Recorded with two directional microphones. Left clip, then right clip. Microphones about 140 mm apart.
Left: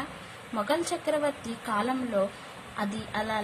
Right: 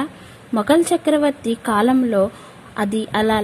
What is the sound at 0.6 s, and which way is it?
A woman's voice, 65° right (ahead or behind).